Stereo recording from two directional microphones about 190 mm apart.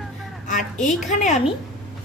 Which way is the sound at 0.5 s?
40° left (ahead or behind).